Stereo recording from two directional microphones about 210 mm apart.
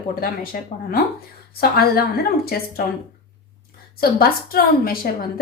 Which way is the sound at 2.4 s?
45° left (ahead or behind).